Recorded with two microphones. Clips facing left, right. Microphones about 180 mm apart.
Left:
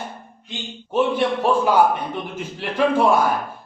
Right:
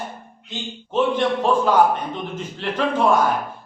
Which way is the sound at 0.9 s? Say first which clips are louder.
Even; 10° left (ahead or behind).